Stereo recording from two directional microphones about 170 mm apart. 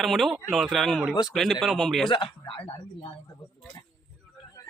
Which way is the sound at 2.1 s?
30° left (ahead or behind).